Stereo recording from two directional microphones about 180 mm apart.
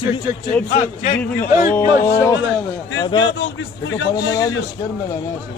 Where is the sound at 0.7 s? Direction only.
40° left (ahead or behind).